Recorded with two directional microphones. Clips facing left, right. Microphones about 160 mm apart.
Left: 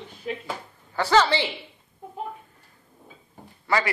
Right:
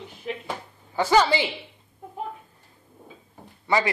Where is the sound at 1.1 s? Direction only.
15° right (ahead or behind).